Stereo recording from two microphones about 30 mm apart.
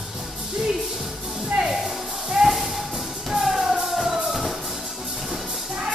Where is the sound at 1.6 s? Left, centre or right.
Right.